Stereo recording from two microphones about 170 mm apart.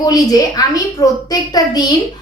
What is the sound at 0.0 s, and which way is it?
A woman's voice, 20° left (ahead or behind).